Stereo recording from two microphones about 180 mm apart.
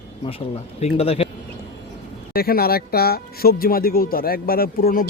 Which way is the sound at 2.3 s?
55° left (ahead or behind).